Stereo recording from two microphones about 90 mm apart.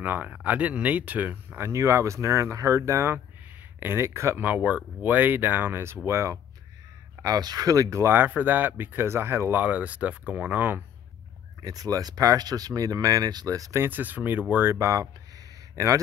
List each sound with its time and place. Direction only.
0.0 s speech: 20° right (ahead or behind)
1.7 s speech: 35° right (ahead or behind)
7.2 s speech: 45° right (ahead or behind); by 10.8 s 20° right (ahead or behind)
11.6 s speech: 40° right (ahead or behind)
13.7 s speech: 20° right (ahead or behind); by 16.0 s 35° right (ahead or behind)